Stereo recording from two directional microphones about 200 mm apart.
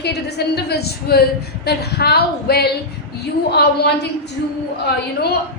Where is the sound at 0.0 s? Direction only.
55° left (ahead or behind).